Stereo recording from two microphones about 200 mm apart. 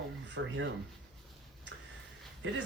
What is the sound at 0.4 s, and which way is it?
Speech, 70° right (ahead or behind).